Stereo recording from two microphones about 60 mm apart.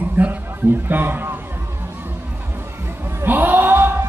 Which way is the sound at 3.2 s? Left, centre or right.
Right.